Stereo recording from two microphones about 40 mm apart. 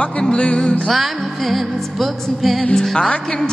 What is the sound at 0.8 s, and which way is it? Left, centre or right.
Music, centre.